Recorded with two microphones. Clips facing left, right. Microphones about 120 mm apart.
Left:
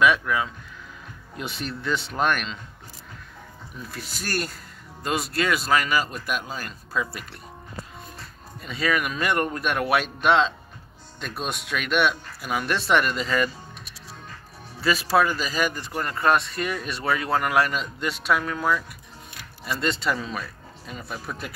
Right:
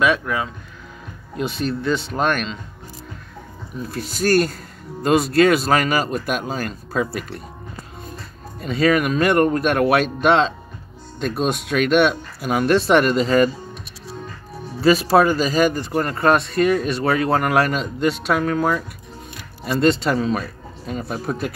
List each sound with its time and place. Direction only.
0.0 s speech: 30° right (ahead or behind)
1.6 s speech: 35° right (ahead or behind)
3.9 s speech: 55° right (ahead or behind)
5.7 s speech: 45° right (ahead or behind)
8.5 s speech: 50° right (ahead or behind)
8.9 s speech: 40° right (ahead or behind)
15.0 s speech: 40° right (ahead or behind)
18.4 s speech: 45° right (ahead or behind)